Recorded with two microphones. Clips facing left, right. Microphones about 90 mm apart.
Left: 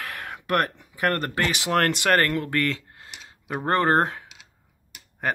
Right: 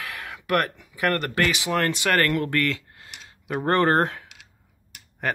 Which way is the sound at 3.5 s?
15° left (ahead or behind).